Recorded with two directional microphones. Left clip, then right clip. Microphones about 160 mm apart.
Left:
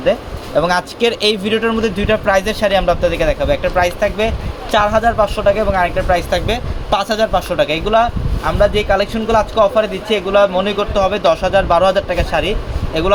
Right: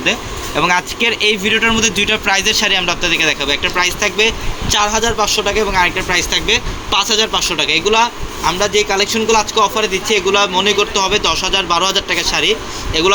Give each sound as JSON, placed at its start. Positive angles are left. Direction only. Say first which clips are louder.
{"t": 0.6, "sound": "speech", "louder": "right 2 dB", "side_deg": 40}
{"t": 2.4, "sound": "speech", "louder": "right 1 dB", "side_deg": 55}